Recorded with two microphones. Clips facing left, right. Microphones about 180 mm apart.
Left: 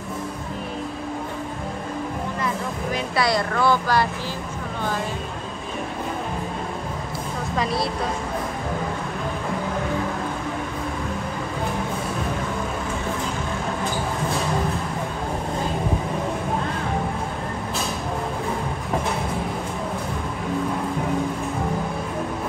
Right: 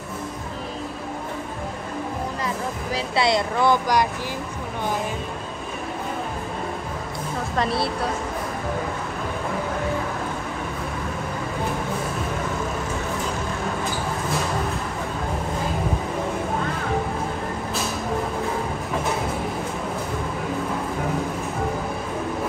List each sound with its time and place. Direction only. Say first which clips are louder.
3.2 s speech: right 1 dB; 20° right (ahead or behind)
7.5 s speech: right 1 dB; centre (ahead or behind)